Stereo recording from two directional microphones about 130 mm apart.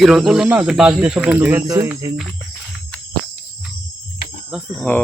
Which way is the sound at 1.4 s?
20° right (ahead or behind).